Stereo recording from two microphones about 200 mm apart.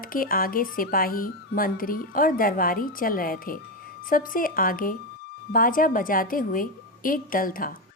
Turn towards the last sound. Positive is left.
turn(degrees=45)  # may be behind; listen again after turning